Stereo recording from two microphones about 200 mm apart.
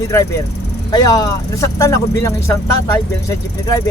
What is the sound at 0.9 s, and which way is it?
Speech, 20° left (ahead or behind).